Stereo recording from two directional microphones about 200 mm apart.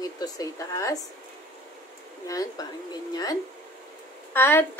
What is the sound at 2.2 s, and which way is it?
A woman's voice, 20° left (ahead or behind).